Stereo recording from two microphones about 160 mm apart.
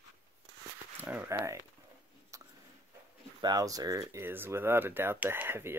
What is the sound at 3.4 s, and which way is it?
Speech, 20° right (ahead or behind).